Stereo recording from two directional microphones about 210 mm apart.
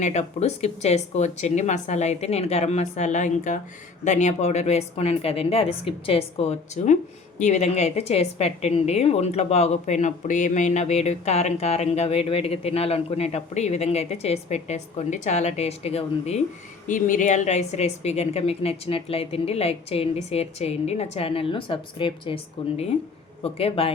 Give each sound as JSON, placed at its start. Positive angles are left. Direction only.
{"t": 0.0, "sound": "a woman's voice", "side_deg": 35}